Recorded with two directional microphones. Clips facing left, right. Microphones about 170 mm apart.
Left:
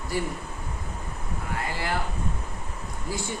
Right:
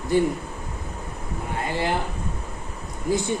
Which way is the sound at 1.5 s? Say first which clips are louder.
Right 5 dB; 20° right (ahead or behind).